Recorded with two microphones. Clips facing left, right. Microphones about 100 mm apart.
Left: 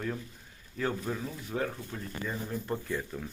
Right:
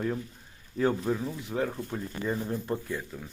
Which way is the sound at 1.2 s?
15° right (ahead or behind).